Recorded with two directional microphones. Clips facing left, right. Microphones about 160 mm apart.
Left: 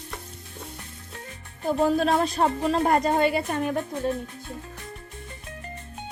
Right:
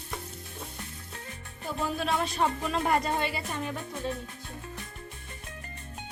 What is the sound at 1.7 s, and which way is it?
Speech, 40° left (ahead or behind).